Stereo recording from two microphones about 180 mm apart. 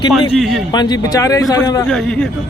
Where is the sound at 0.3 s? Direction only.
Centre (ahead or behind).